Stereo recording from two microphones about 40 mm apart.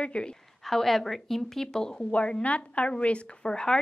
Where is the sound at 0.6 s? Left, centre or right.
Centre.